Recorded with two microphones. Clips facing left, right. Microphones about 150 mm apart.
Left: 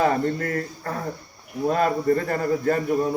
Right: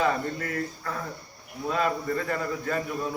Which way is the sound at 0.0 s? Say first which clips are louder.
Left 5 dB; 45° left (ahead or behind).